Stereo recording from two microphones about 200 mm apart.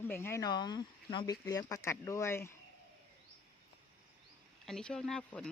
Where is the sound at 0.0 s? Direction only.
10° left (ahead or behind).